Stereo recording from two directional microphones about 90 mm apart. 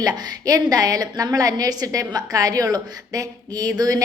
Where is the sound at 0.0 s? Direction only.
45° right (ahead or behind).